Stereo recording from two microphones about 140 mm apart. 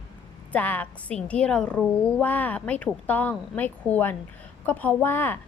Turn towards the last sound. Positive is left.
turn(degrees=15)  # may be behind; listen again after turning